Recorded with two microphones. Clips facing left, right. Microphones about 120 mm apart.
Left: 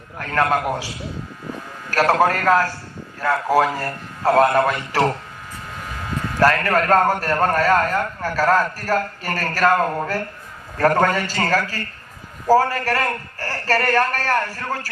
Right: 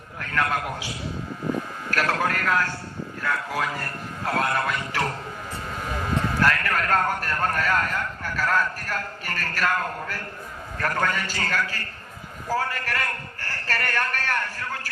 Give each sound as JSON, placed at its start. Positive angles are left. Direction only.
{"t": 0.2, "sound": "a man's voice", "side_deg": 40}
{"t": 1.9, "sound": "a man's voice", "side_deg": 40}
{"t": 6.4, "sound": "a man's voice", "side_deg": 40}